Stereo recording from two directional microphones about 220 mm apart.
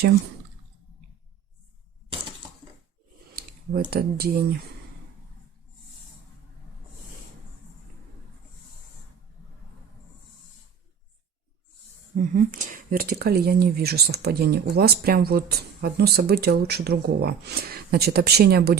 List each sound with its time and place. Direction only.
3.8 s speech: 45° right (ahead or behind)
12.1 s speech: 35° right (ahead or behind)